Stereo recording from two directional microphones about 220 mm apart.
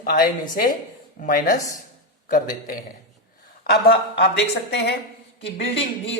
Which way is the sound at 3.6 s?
50° left (ahead or behind).